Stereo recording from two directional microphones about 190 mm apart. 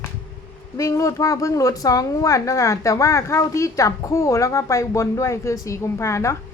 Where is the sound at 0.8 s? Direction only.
15° left (ahead or behind).